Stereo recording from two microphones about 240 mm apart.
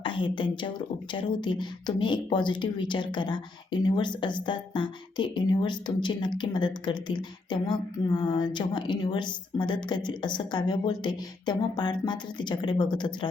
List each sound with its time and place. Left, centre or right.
0.0 s speech: left